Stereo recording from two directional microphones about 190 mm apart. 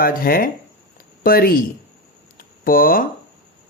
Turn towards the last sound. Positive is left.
turn(degrees=50)  # may be behind; listen again after turning